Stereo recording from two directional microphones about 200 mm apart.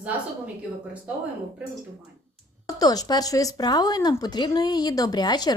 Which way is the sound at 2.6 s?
20° left (ahead or behind).